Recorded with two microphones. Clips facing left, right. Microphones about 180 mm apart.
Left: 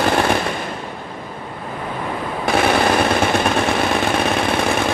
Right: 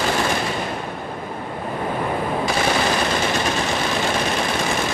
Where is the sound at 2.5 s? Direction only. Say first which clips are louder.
Left 8 dB; 60° left (ahead or behind).